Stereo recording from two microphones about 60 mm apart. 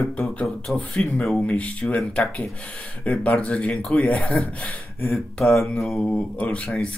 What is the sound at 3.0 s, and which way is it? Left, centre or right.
Speech, left.